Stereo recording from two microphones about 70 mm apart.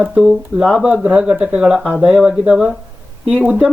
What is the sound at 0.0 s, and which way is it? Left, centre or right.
Speech, centre.